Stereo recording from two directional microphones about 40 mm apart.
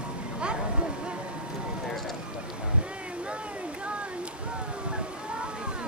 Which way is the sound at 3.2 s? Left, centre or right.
Right.